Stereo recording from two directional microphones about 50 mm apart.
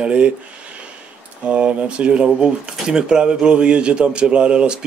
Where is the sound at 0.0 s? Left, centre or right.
Right.